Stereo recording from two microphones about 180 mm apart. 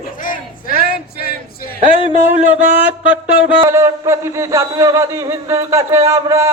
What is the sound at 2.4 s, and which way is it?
Speech, 10° right (ahead or behind).